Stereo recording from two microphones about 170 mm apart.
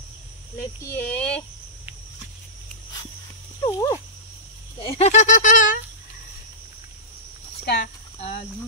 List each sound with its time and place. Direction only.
0.9 s speech: 10° left (ahead or behind)
3.6 s dog: 20° left (ahead or behind)
4.7 s speech: 30° left (ahead or behind); by 5.8 s 50° left (ahead or behind)
7.6 s speech: 65° left (ahead or behind)